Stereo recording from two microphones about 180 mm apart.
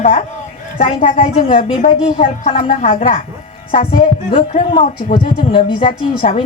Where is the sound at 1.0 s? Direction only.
50° left (ahead or behind).